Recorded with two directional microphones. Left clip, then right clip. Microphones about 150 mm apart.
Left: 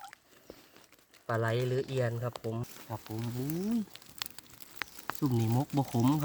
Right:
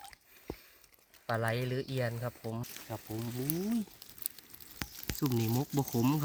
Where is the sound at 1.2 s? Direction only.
15° left (ahead or behind).